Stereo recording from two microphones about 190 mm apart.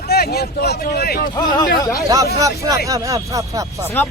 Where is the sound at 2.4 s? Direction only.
15° right (ahead or behind).